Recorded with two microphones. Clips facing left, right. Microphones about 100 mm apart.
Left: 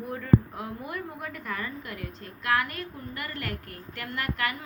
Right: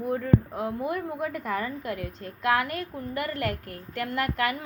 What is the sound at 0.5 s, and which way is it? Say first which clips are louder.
A woman's voice: right 7 dB; 25° right (ahead or behind).